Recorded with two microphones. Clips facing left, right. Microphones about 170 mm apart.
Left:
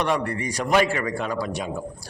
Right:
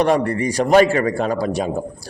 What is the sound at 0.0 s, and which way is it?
A man's voice, 35° right (ahead or behind).